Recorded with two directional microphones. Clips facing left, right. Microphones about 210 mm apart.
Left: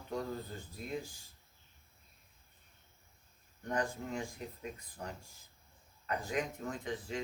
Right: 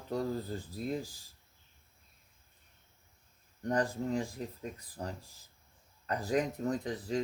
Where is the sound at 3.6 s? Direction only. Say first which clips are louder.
Right 5 dB; 35° right (ahead or behind).